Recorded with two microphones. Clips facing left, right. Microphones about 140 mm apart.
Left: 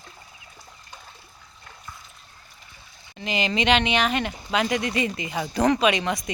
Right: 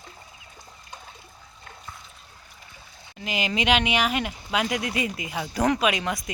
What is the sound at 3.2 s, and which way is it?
Speech, 5° right (ahead or behind).